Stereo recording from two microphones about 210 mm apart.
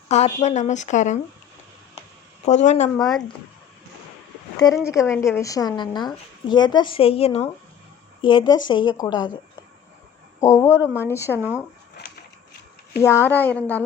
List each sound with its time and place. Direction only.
0.1 s a woman's voice: 30° left (ahead or behind)
2.4 s a woman's voice: 35° left (ahead or behind)
3.0 s speech: centre (ahead or behind)
4.9 s a woman's voice: 15° left (ahead or behind)
10.4 s a woman's voice: 15° left (ahead or behind)
11.3 s speech: 10° right (ahead or behind)
13.0 s a woman's voice: 10° left (ahead or behind)